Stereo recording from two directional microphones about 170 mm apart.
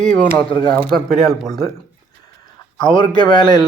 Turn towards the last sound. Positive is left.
turn(degrees=25)  # may be behind; listen again after turning